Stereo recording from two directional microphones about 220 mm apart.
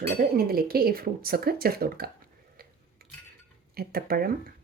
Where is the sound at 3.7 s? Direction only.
45° right (ahead or behind).